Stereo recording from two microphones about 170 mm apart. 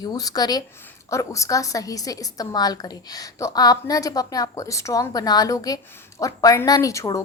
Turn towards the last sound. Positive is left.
turn(degrees=20)  # may be behind; listen again after turning